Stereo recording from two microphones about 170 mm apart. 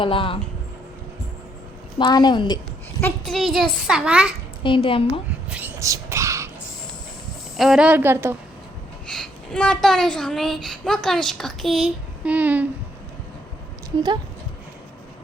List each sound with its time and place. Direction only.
0.0 s a woman's voice: 30° left (ahead or behind)
2.0 s a woman's voice: 25° left (ahead or behind)
3.0 s speech: centre (ahead or behind)
4.6 s a woman's voice: 30° left (ahead or behind)
5.5 s a sound: 10° right (ahead or behind)
7.5 s a woman's voice: centre (ahead or behind)
9.0 s speech: 5° left (ahead or behind)